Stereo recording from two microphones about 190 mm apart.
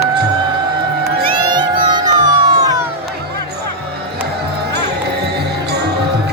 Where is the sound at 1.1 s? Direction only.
25° right (ahead or behind).